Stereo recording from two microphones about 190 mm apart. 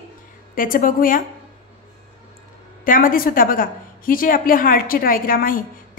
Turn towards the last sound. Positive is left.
turn(degrees=50)  # may be behind; listen again after turning